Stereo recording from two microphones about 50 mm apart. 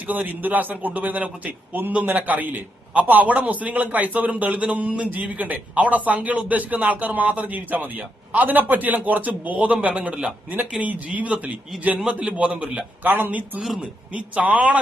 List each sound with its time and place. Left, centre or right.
0.1 s a man's voice: right
14.1 s speech: right